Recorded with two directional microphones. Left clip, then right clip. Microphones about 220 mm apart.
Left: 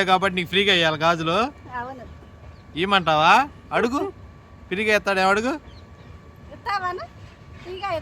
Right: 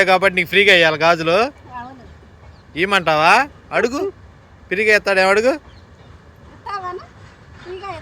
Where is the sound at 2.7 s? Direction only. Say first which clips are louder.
Right 4 dB; 5° left (ahead or behind).